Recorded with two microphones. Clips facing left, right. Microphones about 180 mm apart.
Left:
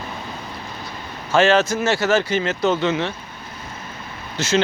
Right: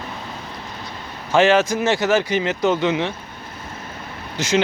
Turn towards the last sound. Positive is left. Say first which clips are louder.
# even
turn(degrees=-15)  # may be behind; listen again after turning